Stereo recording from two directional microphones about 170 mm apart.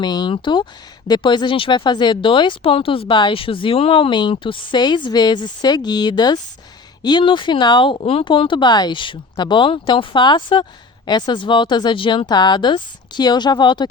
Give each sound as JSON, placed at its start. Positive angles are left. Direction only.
{"t": 0.0, "sound": "speech", "side_deg": 25}